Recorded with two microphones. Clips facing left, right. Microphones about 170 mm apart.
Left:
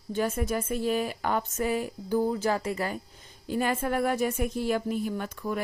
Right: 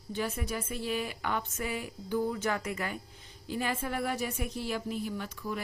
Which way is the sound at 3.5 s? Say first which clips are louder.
Left 6 dB; 50° left (ahead or behind).